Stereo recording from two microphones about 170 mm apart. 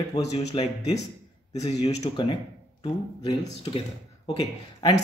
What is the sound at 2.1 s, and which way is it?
Speech, 30° left (ahead or behind).